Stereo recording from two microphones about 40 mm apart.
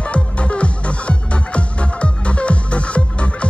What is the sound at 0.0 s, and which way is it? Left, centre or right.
Music, left.